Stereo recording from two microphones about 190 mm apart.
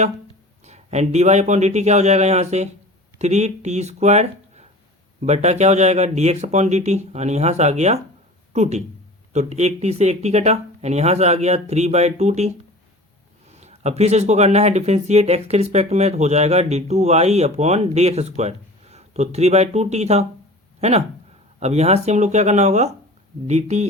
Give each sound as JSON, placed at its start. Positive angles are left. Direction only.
{"t": 0.6, "sound": "speech", "side_deg": -35}